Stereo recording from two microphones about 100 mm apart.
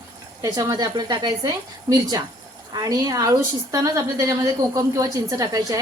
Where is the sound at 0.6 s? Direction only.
45° right (ahead or behind).